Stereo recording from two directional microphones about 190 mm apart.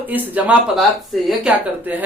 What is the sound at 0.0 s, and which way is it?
A woman's voice, 10° right (ahead or behind).